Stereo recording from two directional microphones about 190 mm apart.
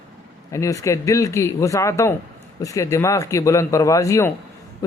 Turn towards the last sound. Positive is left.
turn(degrees=15)  # may be behind; listen again after turning